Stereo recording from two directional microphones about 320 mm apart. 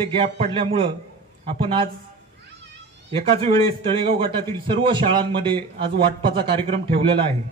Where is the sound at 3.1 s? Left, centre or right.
Centre.